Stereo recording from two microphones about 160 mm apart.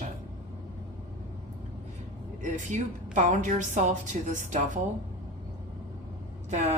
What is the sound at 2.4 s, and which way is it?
Speech, 50° right (ahead or behind).